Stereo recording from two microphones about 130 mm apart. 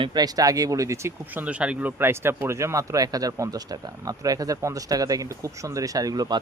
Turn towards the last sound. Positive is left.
turn(degrees=-30)  # may be behind; listen again after turning